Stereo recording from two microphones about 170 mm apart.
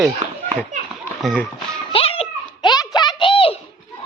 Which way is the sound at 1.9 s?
35° left (ahead or behind).